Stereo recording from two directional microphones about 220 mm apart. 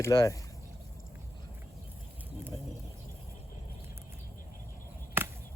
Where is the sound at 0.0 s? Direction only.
15° left (ahead or behind).